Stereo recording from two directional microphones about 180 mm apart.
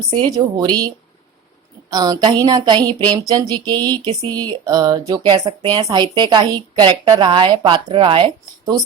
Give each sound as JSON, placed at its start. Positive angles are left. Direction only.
{"t": 0.1, "sound": "a woman's voice", "side_deg": -20}